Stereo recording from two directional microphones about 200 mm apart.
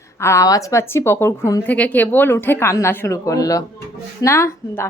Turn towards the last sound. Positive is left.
turn(degrees=15)  # may be behind; listen again after turning